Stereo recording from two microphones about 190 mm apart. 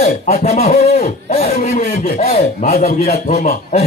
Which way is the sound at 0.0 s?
35° left (ahead or behind).